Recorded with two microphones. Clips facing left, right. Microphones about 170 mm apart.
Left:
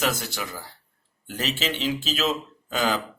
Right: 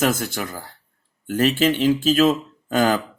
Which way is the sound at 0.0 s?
50° right (ahead or behind).